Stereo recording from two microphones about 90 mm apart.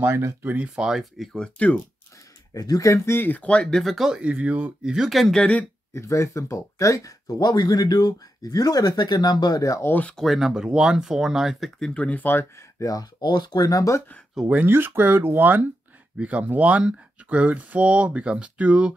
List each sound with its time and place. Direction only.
0.0 s speech: 30° right (ahead or behind)
0.7 s speech: 5° right (ahead or behind)
2.5 s speech: 40° left (ahead or behind)
3.2 s speech: 15° left (ahead or behind)
3.6 s speech: centre (ahead or behind)
5.4 s speech: 15° left (ahead or behind)
5.9 s speech: 35° left (ahead or behind)
9.8 s speech: 20° left (ahead or behind)
10.1 s speech: centre (ahead or behind)
11.9 s speech: 15° left (ahead or behind); by 13.1 s 40° left (ahead or behind)
13.2 s speech: 55° left (ahead or behind); by 14.0 s 40° left (ahead or behind)
14.5 s speech: 20° right (ahead or behind)